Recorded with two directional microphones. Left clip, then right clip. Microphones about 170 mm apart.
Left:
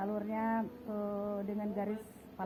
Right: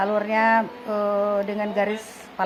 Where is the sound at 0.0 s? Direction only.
50° right (ahead or behind).